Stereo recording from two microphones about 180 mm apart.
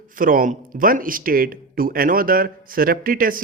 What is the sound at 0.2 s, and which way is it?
Speech, 50° right (ahead or behind).